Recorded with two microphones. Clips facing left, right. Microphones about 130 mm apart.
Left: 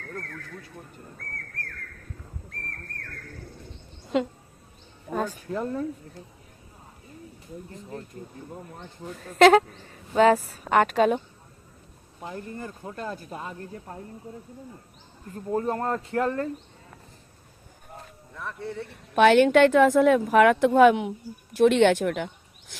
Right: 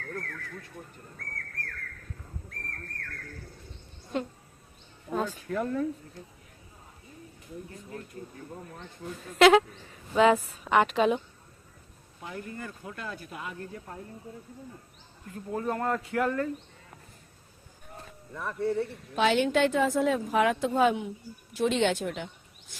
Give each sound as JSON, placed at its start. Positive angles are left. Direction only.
{"t": 4.1, "sound": "speech", "side_deg": 90}
{"t": 5.1, "sound": "speech", "side_deg": 45}
{"t": 5.5, "sound": "speech", "side_deg": 25}
{"t": 7.7, "sound": "speech", "side_deg": 30}
{"t": 9.2, "sound": "a woman's voice", "side_deg": 45}
{"t": 12.2, "sound": "speech", "side_deg": 30}
{"t": 15.3, "sound": "speech", "side_deg": 35}
{"t": 18.3, "sound": "speech", "side_deg": 0}
{"t": 19.1, "sound": "a woman's voice", "side_deg": 65}